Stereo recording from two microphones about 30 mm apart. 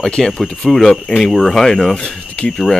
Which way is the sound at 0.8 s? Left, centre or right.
Left.